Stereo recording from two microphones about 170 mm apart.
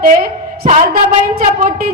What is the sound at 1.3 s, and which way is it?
Speech, 60° right (ahead or behind).